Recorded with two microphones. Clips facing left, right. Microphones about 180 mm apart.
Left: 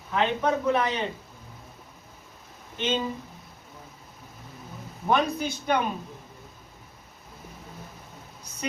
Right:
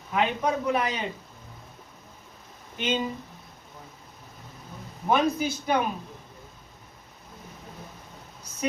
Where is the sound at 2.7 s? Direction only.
10° right (ahead or behind).